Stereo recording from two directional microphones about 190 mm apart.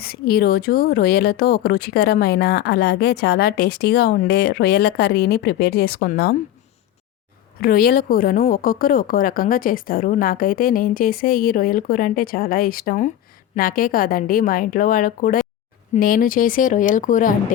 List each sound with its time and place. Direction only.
0.0 s speech: 55° left (ahead or behind)
7.6 s speech: 50° left (ahead or behind)